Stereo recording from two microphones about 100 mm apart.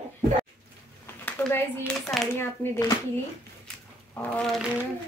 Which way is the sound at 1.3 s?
20° left (ahead or behind).